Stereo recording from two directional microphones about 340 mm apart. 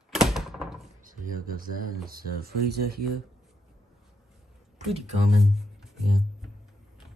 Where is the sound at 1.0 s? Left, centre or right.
Right.